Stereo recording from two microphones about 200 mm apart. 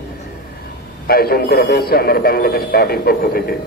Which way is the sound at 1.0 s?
50° left (ahead or behind).